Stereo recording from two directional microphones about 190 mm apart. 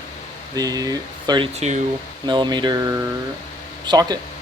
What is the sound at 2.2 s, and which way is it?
Speech, 25° right (ahead or behind).